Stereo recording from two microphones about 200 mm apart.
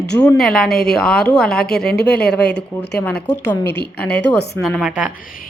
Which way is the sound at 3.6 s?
55° left (ahead or behind).